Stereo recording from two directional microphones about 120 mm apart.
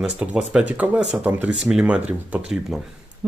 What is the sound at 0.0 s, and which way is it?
Speech, 10° right (ahead or behind).